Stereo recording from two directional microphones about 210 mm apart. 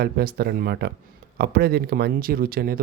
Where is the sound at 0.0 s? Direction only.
50° right (ahead or behind).